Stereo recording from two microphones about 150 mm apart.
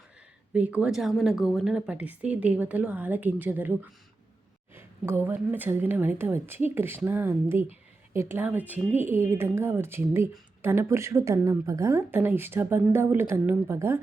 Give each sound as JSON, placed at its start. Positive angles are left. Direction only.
{"t": 0.5, "sound": "speech", "side_deg": -10}